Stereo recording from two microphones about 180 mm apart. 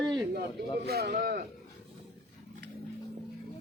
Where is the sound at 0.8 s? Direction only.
60° right (ahead or behind).